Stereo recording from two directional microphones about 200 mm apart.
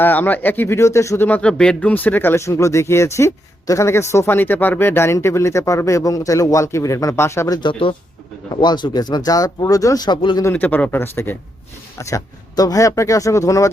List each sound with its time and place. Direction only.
0.0 s speech: 10° left (ahead or behind)
10.5 s speech: 10° left (ahead or behind)